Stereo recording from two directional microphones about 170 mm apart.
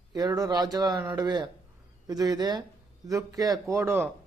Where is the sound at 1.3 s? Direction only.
25° right (ahead or behind).